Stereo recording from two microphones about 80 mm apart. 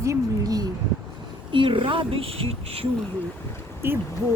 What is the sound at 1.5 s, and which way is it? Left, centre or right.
Speech, right.